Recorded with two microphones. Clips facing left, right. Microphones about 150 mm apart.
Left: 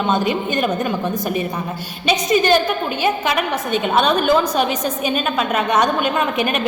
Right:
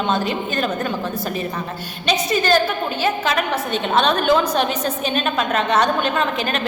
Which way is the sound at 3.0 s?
10° left (ahead or behind).